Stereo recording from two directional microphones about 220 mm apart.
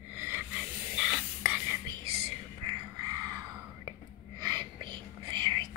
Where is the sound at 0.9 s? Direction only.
5° right (ahead or behind).